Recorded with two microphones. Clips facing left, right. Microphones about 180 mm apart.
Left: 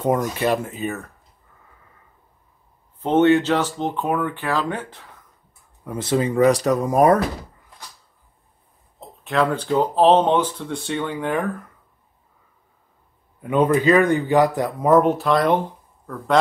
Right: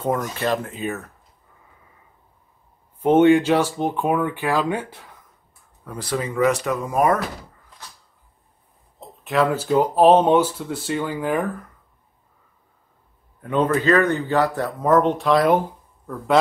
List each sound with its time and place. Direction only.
0.0 s speech: 15° left (ahead or behind); by 1.0 s centre (ahead or behind)
3.0 s speech: 10° right (ahead or behind)
5.9 s speech: 20° left (ahead or behind)
9.2 s speech: 5° right (ahead or behind)
13.4 s speech: 10° left (ahead or behind); by 15.6 s 5° right (ahead or behind)